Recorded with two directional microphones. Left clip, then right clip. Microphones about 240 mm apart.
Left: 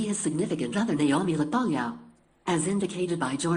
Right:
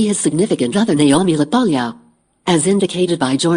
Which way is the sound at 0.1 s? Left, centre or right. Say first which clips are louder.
Right 13 dB; right.